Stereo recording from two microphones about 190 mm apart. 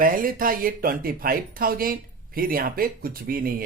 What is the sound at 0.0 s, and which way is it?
Speech, 45° right (ahead or behind).